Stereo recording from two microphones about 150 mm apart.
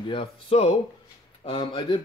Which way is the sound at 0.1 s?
40° left (ahead or behind).